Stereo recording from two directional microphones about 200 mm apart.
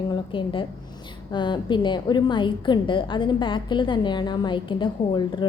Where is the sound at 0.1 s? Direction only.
25° left (ahead or behind).